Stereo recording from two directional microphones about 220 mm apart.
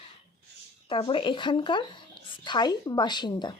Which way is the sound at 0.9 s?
25° left (ahead or behind).